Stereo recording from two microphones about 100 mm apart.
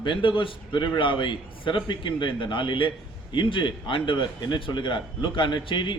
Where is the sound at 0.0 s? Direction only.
55° left (ahead or behind).